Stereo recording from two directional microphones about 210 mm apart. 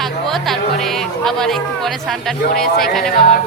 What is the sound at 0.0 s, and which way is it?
Music, centre (ahead or behind).